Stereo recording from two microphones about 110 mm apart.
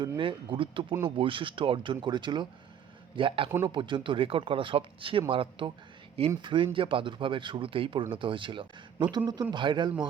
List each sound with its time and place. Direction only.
0.2 s speech: 50° right (ahead or behind)